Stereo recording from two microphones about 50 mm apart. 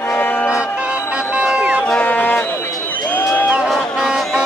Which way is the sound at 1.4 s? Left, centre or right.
Right.